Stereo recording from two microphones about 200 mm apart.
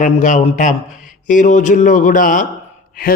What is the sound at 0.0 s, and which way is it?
A man's voice, 40° left (ahead or behind).